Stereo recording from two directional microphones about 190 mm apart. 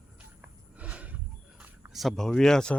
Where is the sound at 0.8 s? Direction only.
5° right (ahead or behind).